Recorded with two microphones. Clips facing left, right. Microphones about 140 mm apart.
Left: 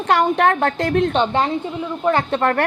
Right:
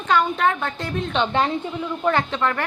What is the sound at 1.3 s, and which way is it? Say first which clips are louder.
Speech: left 2 dB; 25° left (ahead or behind).